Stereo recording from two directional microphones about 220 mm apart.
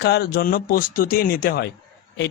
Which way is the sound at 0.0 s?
50° left (ahead or behind).